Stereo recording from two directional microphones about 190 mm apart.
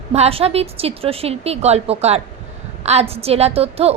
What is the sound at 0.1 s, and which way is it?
A woman's voice, 30° right (ahead or behind).